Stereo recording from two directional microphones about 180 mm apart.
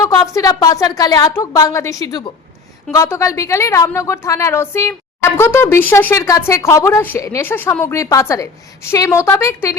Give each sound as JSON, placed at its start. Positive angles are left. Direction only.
{"t": 0.0, "sound": "a woman's voice", "side_deg": 20}